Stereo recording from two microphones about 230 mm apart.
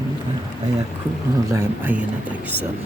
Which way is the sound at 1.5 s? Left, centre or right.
Centre.